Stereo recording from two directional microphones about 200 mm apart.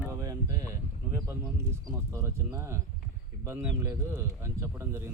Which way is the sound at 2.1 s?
15° right (ahead or behind).